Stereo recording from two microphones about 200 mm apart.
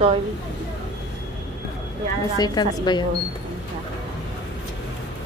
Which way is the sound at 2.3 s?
20° left (ahead or behind).